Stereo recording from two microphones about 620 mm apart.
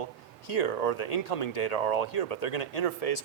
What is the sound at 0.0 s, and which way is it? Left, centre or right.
Speech, left.